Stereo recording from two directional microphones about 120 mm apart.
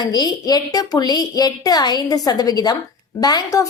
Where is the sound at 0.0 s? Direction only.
35° left (ahead or behind).